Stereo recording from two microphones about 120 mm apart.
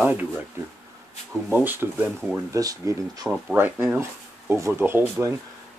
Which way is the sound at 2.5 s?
30° right (ahead or behind).